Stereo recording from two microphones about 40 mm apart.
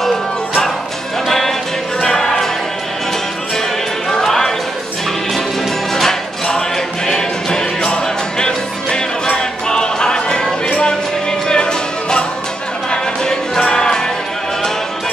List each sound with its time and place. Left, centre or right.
0.0 s music: centre
2.0 s music: centre
4.2 s a sound: centre
5.9 s music: centre